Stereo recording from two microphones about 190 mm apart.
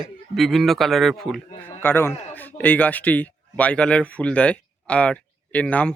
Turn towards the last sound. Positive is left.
turn(degrees=5)  # may be behind; listen again after turning